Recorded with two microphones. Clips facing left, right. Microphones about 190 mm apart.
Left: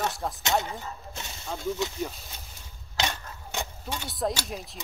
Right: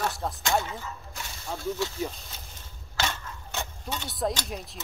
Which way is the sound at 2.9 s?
15° left (ahead or behind).